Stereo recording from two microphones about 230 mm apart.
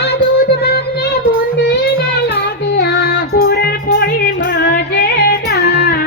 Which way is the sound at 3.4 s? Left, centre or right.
Left.